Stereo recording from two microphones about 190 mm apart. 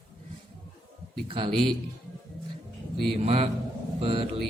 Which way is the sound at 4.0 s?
25° right (ahead or behind).